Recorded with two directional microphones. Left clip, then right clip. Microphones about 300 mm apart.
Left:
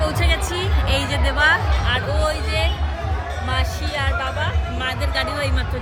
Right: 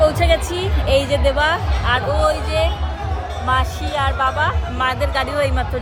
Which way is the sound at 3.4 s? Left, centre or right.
Centre.